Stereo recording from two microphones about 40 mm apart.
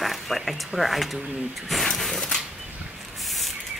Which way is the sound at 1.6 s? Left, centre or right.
Centre.